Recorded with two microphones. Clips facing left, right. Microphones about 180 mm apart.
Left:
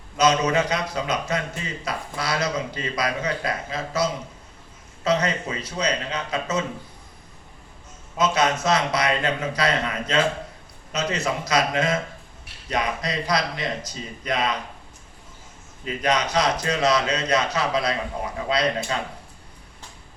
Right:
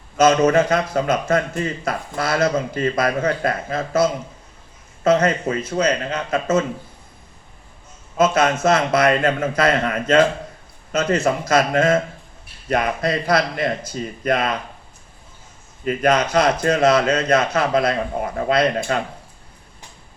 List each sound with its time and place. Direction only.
0.2 s speech: 50° right (ahead or behind)
8.2 s speech: 50° right (ahead or behind)
15.8 s speech: 50° right (ahead or behind)